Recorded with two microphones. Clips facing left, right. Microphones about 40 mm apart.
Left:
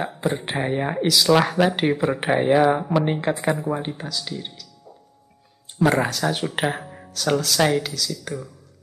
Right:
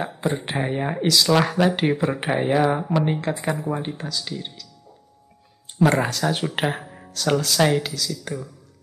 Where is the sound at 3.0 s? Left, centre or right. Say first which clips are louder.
Even; left.